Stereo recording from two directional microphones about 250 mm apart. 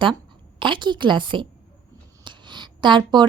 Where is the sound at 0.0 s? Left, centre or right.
Centre.